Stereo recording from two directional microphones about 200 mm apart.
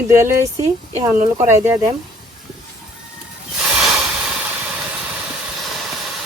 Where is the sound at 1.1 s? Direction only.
40° right (ahead or behind).